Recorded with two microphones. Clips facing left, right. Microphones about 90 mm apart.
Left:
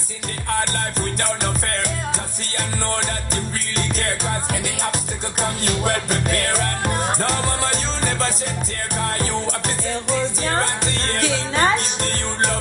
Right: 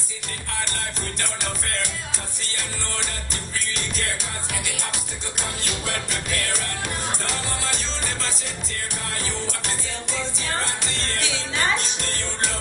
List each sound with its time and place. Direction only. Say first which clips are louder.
5.4 s music: left 9 dB; 45° left (ahead or behind)